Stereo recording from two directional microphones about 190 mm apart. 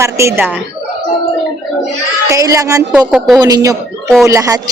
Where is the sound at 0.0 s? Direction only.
15° right (ahead or behind).